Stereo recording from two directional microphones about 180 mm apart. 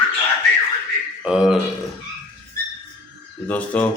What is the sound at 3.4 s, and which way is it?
Speech, 10° left (ahead or behind).